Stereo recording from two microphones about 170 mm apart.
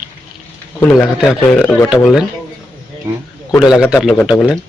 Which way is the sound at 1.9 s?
5° right (ahead or behind).